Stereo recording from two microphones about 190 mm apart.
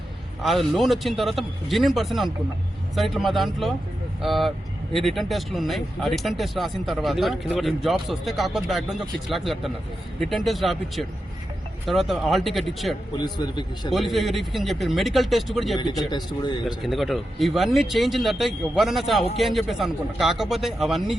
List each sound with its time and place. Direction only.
0.4 s speech: centre (ahead or behind)
13.1 s a man's voice: 20° left (ahead or behind)
13.9 s speech: centre (ahead or behind)
16.1 s a man's voice: 20° left (ahead or behind)
16.8 s speech: centre (ahead or behind)